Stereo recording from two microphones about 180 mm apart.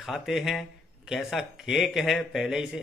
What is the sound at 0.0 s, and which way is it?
Speech, centre (ahead or behind).